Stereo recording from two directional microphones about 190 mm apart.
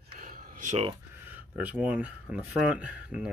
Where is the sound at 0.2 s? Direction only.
50° right (ahead or behind).